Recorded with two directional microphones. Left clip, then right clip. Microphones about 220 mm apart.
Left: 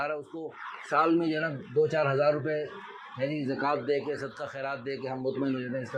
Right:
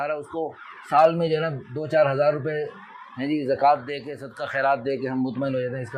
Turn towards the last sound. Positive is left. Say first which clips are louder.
# right 5 dB
turn(degrees=-45)  # may be behind; listen again after turning